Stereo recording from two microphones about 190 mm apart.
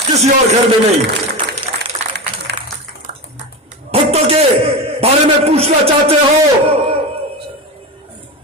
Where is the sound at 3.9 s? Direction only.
30° right (ahead or behind).